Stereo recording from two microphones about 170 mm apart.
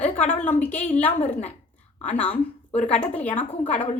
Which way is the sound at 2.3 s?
40° left (ahead or behind).